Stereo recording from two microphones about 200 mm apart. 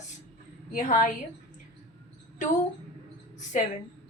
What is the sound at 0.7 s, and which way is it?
Speech, 40° left (ahead or behind).